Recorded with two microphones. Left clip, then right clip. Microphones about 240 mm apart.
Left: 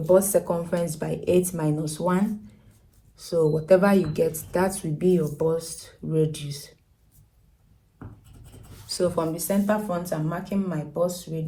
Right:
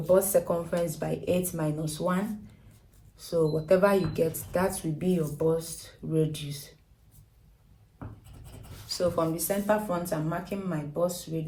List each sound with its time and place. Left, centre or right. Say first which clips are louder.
0.0 s speech: left 3 dB; left
8.9 s speech: left 2 dB; left